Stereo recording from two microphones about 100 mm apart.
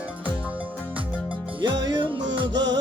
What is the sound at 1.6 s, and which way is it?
Music, 50° right (ahead or behind).